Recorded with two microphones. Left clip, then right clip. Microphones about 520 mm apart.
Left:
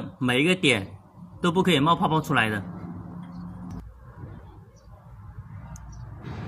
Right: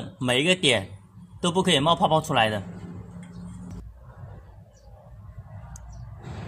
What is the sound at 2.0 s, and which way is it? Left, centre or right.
Speech, right.